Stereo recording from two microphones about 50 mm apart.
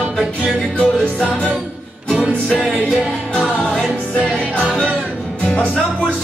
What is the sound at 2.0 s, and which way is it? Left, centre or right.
Music, right.